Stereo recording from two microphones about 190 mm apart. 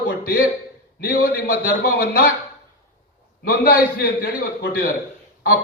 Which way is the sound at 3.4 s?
50° left (ahead or behind).